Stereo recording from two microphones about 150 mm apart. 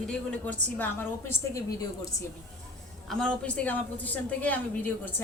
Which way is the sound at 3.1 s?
5° left (ahead or behind).